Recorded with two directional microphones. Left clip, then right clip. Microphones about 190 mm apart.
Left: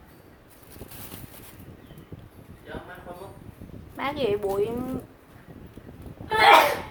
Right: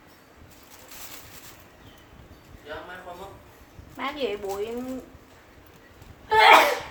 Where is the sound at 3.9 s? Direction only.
50° left (ahead or behind).